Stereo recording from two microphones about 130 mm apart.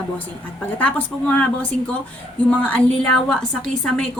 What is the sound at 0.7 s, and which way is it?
Speech, 10° left (ahead or behind).